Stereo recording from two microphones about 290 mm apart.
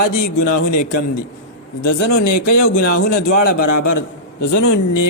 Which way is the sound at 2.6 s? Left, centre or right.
Left.